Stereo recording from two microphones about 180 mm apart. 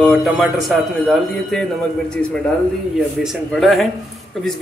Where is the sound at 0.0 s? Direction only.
Centre (ahead or behind).